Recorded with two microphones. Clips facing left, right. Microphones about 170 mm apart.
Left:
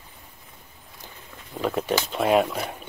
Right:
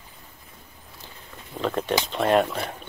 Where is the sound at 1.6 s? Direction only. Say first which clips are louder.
Even; 10° left (ahead or behind).